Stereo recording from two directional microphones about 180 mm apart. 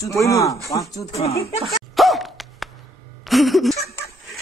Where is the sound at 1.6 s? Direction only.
Centre (ahead or behind).